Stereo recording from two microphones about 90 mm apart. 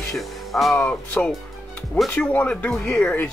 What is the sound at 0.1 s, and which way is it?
Music, centre (ahead or behind).